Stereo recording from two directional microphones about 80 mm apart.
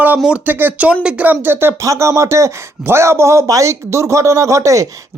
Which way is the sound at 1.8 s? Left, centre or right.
Right.